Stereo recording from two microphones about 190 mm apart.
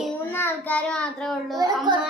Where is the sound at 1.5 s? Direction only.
20° right (ahead or behind).